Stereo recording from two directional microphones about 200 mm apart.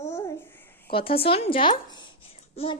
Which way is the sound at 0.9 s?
25° left (ahead or behind).